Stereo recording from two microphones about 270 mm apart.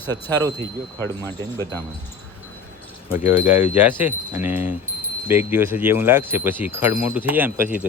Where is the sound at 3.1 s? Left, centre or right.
Centre.